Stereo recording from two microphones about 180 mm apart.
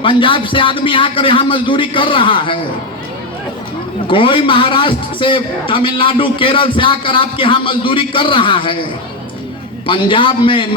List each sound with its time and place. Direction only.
0.0 s a man's voice: 30° left (ahead or behind)
4.0 s a man's voice: 30° left (ahead or behind)
9.8 s a man's voice: 30° left (ahead or behind)